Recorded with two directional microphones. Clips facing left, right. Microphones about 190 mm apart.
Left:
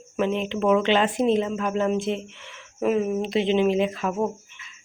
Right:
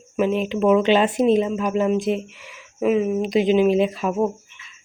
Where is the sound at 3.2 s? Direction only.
30° left (ahead or behind).